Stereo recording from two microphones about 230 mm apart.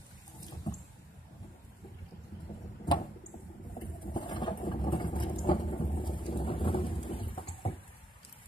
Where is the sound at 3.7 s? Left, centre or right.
Centre.